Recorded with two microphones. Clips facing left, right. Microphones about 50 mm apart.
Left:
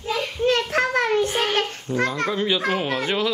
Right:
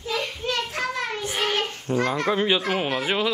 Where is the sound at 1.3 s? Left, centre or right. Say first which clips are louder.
Left 2 dB; centre.